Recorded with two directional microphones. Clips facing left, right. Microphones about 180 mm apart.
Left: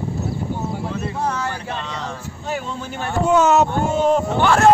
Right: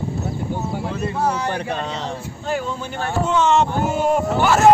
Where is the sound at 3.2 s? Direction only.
5° left (ahead or behind).